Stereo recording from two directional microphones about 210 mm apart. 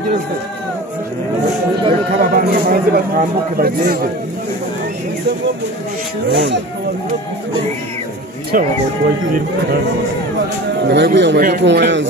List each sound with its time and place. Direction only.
2.3 s speech: 45° right (ahead or behind)
6.3 s speech: 55° right (ahead or behind)
8.5 s speech: 45° right (ahead or behind)
10.9 s a man's voice: 55° right (ahead or behind)